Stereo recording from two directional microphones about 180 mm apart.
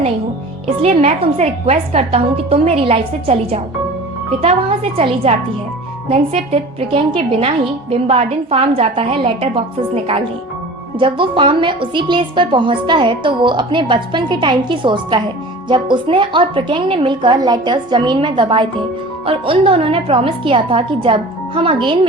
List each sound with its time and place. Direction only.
0.8 s a woman's voice: 35° right (ahead or behind)